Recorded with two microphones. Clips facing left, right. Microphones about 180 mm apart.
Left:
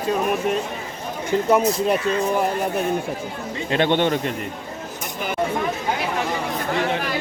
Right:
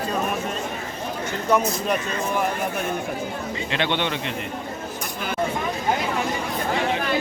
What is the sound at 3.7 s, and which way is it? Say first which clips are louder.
Speech: left 7 dB; 45° left (ahead or behind).